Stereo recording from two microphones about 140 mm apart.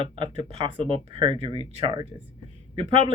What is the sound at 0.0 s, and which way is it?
Speech, 40° right (ahead or behind).